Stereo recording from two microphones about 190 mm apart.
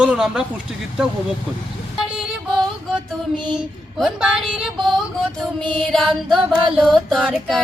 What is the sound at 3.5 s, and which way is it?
Speech, 5° right (ahead or behind).